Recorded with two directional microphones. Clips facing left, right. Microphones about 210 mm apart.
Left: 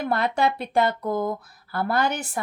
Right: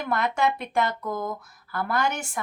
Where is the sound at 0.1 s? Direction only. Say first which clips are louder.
Even; 30° left (ahead or behind).